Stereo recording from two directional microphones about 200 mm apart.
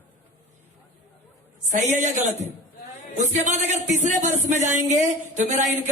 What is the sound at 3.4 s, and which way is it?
A man's voice, 35° right (ahead or behind).